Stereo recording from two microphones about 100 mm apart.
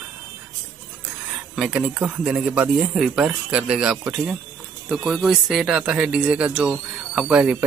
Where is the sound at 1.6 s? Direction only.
10° right (ahead or behind).